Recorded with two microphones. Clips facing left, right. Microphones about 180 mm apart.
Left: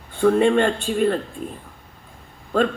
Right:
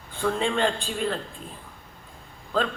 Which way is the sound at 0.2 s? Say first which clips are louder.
Left 8 dB; 55° left (ahead or behind).